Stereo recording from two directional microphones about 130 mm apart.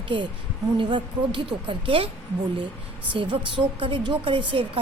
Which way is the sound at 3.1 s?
40° right (ahead or behind).